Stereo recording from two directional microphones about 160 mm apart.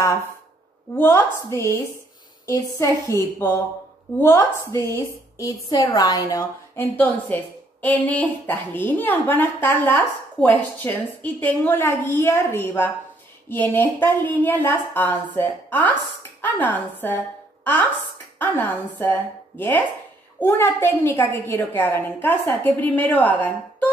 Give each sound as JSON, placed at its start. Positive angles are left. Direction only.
{"t": 0.9, "sound": "a woman's voice", "side_deg": 15}
{"t": 19.0, "sound": "a woman's voice", "side_deg": 15}
{"t": 20.3, "sound": "a woman's voice", "side_deg": 15}